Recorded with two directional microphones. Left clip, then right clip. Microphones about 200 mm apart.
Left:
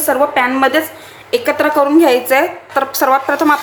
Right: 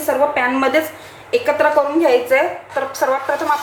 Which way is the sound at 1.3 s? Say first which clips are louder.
Left 1 dB; 35° left (ahead or behind).